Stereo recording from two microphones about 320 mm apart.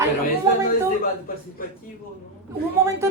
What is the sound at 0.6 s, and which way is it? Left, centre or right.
Speech, left.